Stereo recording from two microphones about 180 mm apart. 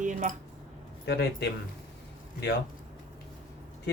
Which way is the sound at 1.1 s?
70° left (ahead or behind).